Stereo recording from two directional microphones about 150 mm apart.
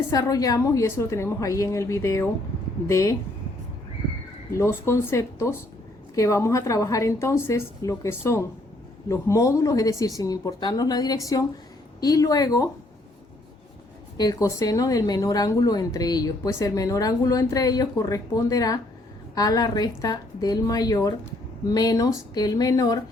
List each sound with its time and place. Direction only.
0.1 s speech: 25° left (ahead or behind)
4.5 s speech: 20° left (ahead or behind)
14.2 s speech: 25° left (ahead or behind)